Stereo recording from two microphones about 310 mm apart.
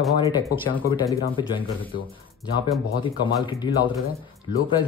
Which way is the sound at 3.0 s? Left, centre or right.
Centre.